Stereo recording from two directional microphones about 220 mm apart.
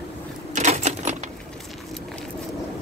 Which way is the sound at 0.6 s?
30° right (ahead or behind).